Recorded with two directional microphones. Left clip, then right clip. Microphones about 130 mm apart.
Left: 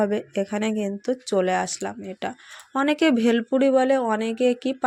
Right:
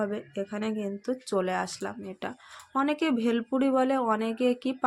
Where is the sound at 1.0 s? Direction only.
25° left (ahead or behind).